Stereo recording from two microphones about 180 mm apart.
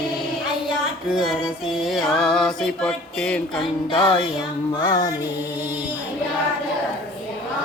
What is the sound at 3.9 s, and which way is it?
Music, 30° left (ahead or behind).